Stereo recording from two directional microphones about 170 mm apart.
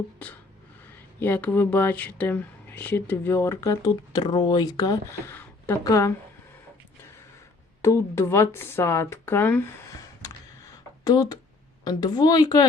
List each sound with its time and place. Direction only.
1.2 s a woman's voice: 10° left (ahead or behind)
7.8 s speech: 15° left (ahead or behind)
11.0 s a woman's voice: 25° left (ahead or behind)